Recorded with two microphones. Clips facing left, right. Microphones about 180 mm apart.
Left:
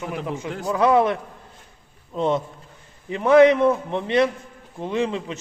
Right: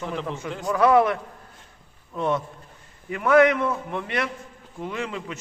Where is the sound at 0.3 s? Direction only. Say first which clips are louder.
Left 2 dB; 15° left (ahead or behind).